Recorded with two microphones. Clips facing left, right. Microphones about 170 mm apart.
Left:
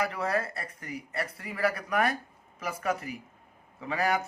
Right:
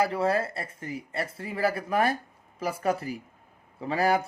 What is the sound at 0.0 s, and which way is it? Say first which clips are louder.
A man's voice: right 5 dB; 30° right (ahead or behind).